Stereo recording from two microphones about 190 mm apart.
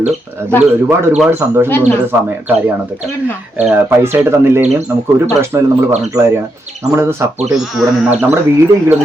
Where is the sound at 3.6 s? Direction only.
10° right (ahead or behind).